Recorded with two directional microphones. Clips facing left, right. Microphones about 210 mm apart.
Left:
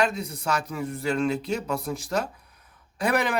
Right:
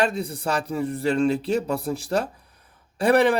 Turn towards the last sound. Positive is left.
turn(degrees=-30)  # may be behind; listen again after turning